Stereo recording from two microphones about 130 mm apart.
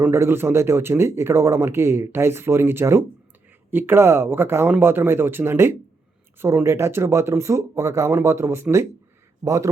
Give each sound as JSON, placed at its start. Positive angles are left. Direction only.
{"t": 0.0, "sound": "speech", "side_deg": -20}